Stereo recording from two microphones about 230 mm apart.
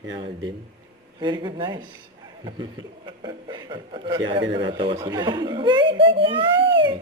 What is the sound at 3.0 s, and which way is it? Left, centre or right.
A child's voice, centre.